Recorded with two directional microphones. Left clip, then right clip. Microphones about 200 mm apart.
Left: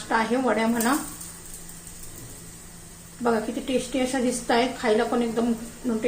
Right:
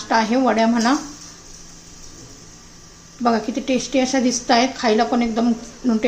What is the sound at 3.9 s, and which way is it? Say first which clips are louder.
A woman's voice: right 6 dB; 30° right (ahead or behind).